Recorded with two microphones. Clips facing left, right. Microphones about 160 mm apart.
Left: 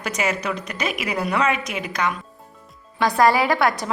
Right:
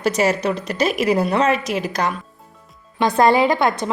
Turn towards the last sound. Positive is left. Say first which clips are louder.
# right 3 dB
turn(degrees=-20)  # may be behind; listen again after turning